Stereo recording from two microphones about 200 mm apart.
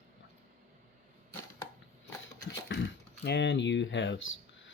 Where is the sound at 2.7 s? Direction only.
65° left (ahead or behind).